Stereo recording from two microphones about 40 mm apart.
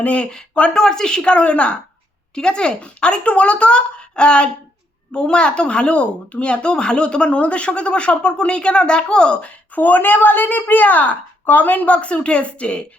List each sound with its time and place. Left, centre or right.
0.0 s speech: left
0.7 s speech: centre; by 1.8 s left
2.3 s speech: left
9.4 s a woman's voice: left